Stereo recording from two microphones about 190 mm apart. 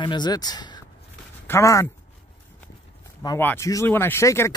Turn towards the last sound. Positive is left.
turn(degrees=15)  # may be behind; listen again after turning